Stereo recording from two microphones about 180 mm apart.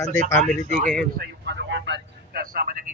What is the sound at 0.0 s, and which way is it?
Speech, 40° left (ahead or behind).